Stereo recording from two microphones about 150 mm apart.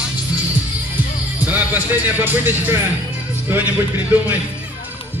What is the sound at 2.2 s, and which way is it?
Speech, 15° right (ahead or behind).